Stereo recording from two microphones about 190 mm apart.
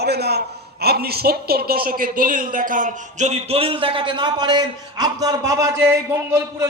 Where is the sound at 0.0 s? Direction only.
60° right (ahead or behind).